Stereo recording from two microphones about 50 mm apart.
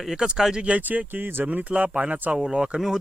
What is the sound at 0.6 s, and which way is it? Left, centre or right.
Speech, right.